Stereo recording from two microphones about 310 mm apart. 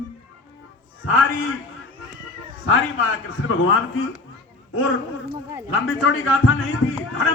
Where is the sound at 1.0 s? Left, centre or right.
Left.